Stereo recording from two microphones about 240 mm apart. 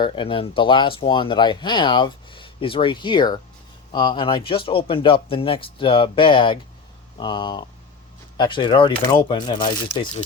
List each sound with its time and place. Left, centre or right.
0.0 s speech: left